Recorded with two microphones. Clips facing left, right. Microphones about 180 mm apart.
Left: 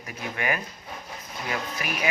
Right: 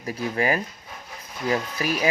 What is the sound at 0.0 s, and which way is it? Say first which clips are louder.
Speech: right 6 dB; 35° right (ahead or behind).